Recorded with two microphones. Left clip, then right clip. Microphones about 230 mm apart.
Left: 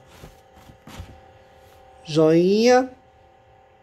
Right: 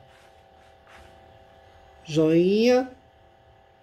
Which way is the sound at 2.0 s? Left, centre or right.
Centre.